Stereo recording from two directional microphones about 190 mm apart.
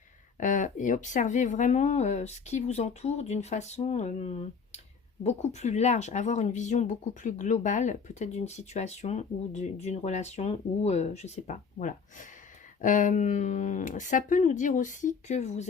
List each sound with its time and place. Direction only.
0.3 s speech: 40° left (ahead or behind)